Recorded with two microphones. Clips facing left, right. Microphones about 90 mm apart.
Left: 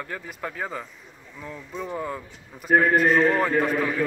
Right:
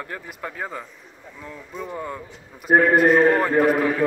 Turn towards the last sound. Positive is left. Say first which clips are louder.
# right 5 dB
turn(degrees=-55)  # may be behind; listen again after turning